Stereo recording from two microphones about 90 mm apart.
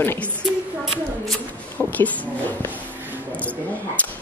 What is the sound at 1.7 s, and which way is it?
Speech, 15° left (ahead or behind).